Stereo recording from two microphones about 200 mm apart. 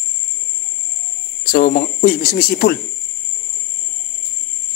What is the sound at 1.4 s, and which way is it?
Speech, 45° left (ahead or behind).